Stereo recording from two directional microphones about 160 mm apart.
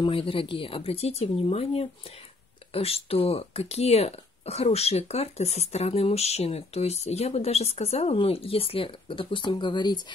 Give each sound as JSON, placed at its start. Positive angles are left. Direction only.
{"t": 0.0, "sound": "speech", "side_deg": 35}